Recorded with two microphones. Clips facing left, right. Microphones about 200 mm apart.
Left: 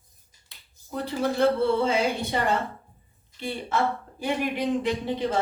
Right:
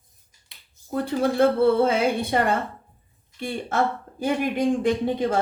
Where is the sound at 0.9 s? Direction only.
50° right (ahead or behind).